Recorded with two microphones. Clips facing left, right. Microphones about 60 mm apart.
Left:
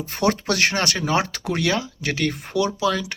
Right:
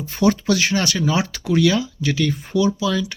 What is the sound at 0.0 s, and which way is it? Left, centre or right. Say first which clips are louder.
Speech: right 3 dB; left.